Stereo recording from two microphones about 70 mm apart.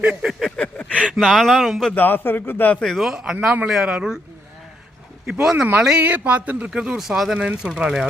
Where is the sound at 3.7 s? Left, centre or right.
Centre.